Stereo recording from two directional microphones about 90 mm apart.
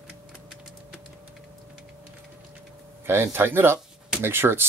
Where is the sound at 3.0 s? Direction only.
25° right (ahead or behind).